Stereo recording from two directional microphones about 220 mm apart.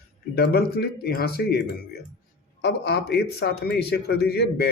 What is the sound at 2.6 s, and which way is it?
Speech, 50° left (ahead or behind).